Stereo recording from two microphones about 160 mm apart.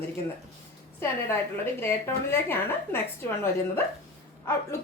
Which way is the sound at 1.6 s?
15° left (ahead or behind).